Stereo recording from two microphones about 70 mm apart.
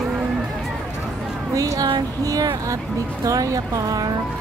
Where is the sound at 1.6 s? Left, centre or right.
Right.